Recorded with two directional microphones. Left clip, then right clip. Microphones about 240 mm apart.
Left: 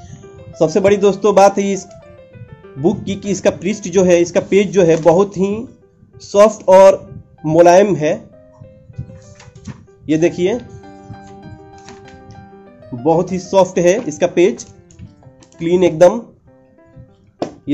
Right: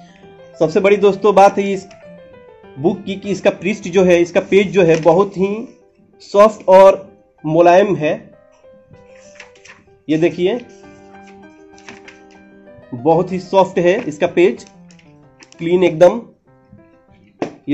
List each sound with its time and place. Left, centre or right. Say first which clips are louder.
0.6 s speech: even; centre
10.0 s speech: left 1 dB; centre
12.9 s speech: right 1 dB; centre
15.6 s speech: even; centre